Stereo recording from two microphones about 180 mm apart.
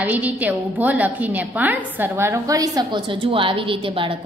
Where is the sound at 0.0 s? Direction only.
10° right (ahead or behind).